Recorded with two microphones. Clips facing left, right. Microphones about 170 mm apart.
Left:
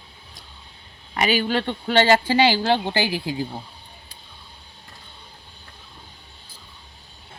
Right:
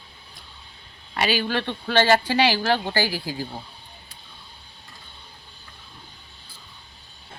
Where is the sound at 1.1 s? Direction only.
20° left (ahead or behind).